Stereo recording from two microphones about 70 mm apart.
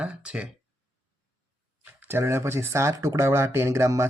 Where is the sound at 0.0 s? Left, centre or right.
Centre.